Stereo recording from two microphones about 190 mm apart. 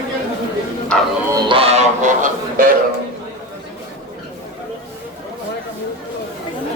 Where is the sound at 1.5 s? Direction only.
30° right (ahead or behind).